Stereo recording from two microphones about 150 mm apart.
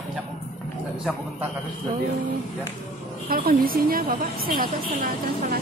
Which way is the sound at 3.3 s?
80° right.